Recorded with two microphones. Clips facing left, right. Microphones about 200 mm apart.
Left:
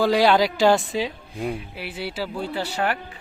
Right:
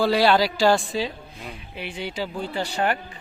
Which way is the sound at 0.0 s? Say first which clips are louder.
Left 1 dB; 15° left (ahead or behind).